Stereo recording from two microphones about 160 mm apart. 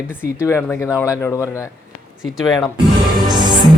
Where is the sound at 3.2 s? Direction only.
30° right (ahead or behind).